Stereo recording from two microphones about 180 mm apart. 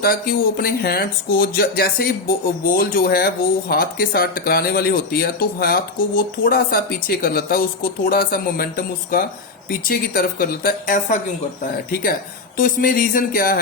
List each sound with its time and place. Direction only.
0.0 s speech: 55° left (ahead or behind)
12.5 s speech: 50° left (ahead or behind)